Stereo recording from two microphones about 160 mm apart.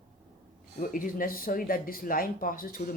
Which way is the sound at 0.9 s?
60° left (ahead or behind).